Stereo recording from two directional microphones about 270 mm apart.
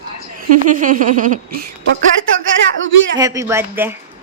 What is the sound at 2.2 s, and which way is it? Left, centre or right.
Speech, right.